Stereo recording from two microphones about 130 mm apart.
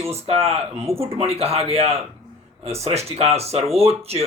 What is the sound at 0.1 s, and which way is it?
Speech, 50° right (ahead or behind).